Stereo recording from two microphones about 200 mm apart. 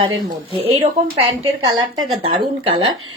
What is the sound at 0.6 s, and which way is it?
Speech, 30° right (ahead or behind).